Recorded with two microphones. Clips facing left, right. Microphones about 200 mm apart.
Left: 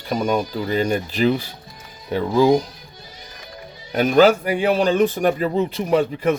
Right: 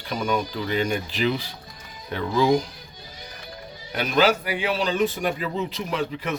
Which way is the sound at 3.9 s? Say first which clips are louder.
Left 7 dB; 45° left (ahead or behind).